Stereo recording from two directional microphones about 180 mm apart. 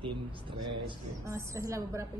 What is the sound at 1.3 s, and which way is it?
Speech, 15° right (ahead or behind).